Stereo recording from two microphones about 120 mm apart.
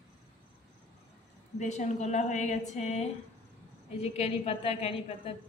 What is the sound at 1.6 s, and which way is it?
A woman's voice, 75° left (ahead or behind).